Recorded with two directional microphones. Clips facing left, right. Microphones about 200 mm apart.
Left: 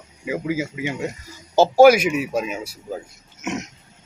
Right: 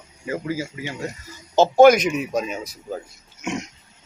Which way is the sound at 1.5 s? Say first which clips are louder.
Left 1 dB; 5° left (ahead or behind).